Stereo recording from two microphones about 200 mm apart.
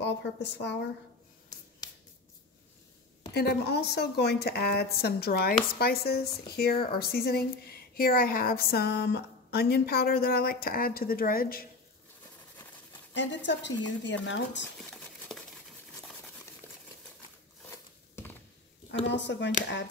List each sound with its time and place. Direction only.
0.0 s speech: 60° left (ahead or behind)
3.3 s a woman's voice: 55° left (ahead or behind)
13.1 s speech: 65° left (ahead or behind)
19.0 s speech: 60° left (ahead or behind)